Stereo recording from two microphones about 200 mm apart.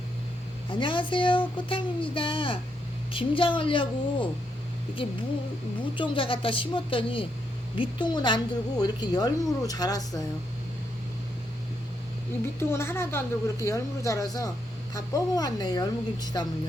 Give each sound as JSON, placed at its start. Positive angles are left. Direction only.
{"t": 0.7, "sound": "a woman's voice", "side_deg": 25}
{"t": 12.5, "sound": "a woman's voice", "side_deg": 15}